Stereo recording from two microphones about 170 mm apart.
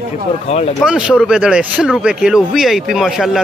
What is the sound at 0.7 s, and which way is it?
Speech, 5° right (ahead or behind).